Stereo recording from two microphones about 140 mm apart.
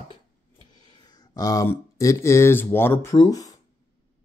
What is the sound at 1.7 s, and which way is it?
Speech, 20° left (ahead or behind).